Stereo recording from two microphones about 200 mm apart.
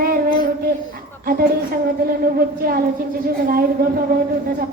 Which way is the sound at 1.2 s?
45° right (ahead or behind).